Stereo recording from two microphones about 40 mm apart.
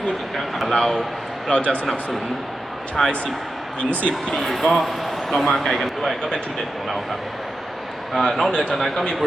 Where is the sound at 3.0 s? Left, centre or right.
Centre.